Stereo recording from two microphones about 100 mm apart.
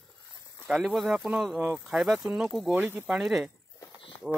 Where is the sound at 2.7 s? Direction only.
20° right (ahead or behind).